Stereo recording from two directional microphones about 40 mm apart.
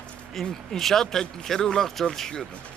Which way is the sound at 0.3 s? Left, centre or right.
Centre.